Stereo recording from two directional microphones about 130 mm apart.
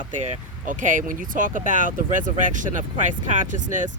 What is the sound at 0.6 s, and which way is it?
Speech, 85° right.